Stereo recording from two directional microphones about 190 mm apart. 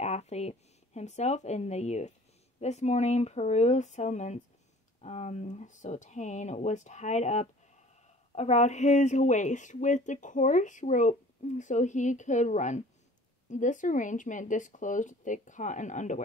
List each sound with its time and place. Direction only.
0.0 s speech: 35° left (ahead or behind)